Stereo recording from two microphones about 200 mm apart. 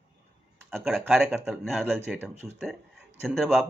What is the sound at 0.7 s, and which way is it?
Speech, centre (ahead or behind).